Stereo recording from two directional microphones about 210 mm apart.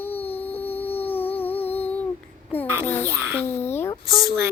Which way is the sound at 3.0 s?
10° right (ahead or behind).